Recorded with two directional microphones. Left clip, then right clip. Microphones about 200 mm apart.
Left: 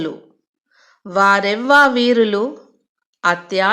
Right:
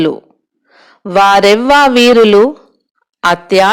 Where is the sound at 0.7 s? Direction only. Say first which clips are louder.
Right 9 dB; 35° right (ahead or behind).